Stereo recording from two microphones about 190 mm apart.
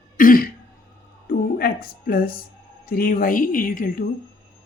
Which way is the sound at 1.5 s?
50° left (ahead or behind).